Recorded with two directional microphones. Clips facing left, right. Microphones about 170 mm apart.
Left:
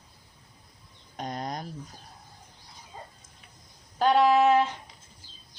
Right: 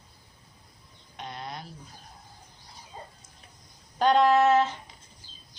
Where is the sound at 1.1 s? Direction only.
40° left (ahead or behind).